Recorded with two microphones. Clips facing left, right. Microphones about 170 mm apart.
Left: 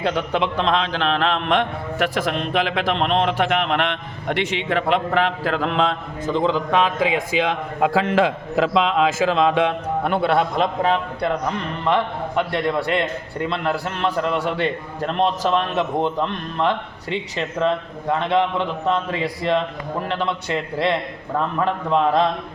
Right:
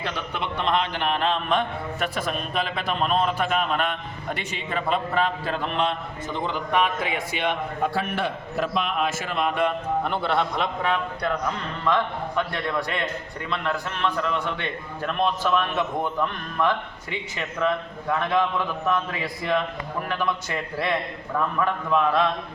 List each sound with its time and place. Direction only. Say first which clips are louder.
0.2 s a man's voice: left 8 dB; 90° left; by 10.3 s 60° left (ahead or behind)
10.6 s a man's voice: left 5 dB; 30° left (ahead or behind)
13.5 s a man's voice: left 2 dB; 30° left (ahead or behind)